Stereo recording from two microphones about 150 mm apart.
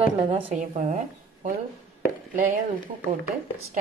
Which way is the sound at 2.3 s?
60° right (ahead or behind).